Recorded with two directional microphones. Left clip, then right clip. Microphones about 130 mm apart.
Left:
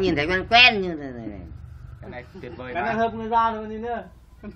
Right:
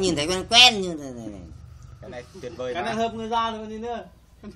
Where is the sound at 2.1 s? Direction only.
50° right (ahead or behind).